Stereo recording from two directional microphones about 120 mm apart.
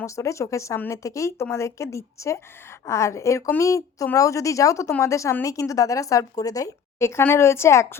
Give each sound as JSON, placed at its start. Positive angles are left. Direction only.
{"t": 0.0, "sound": "a woman's voice", "side_deg": 25}